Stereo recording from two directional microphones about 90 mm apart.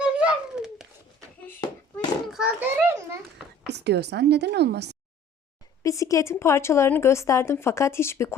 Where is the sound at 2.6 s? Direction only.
30° right (ahead or behind).